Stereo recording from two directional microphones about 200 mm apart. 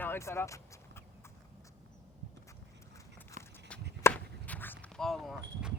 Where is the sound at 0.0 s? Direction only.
15° left (ahead or behind).